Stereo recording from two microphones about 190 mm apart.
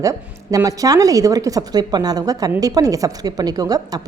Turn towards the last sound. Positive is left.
turn(degrees=-20)  # may be behind; listen again after turning